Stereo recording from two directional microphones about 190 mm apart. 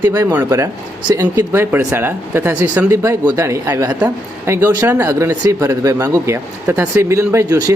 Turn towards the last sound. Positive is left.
turn(degrees=-20)  # may be behind; listen again after turning